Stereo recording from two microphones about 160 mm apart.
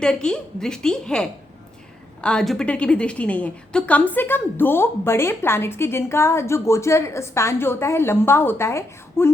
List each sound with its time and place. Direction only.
0.0 s a woman's voice: 5° left (ahead or behind)